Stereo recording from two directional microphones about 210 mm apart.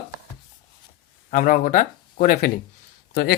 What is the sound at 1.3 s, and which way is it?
Speech, 40° left (ahead or behind).